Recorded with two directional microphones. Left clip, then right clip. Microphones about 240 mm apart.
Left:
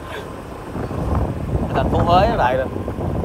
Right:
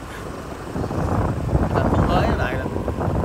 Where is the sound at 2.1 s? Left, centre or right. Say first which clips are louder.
Left 7 dB; centre.